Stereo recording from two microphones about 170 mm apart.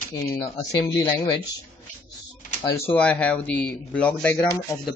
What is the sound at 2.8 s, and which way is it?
Speech, 10° left (ahead or behind).